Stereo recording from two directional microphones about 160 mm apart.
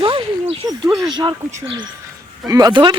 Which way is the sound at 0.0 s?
35° right (ahead or behind).